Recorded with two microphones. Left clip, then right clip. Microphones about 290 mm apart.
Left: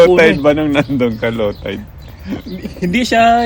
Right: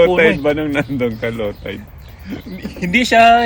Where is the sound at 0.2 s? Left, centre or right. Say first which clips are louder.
Left 3 dB; centre.